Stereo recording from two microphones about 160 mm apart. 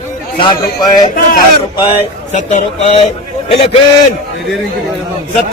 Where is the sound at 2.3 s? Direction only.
50° left (ahead or behind).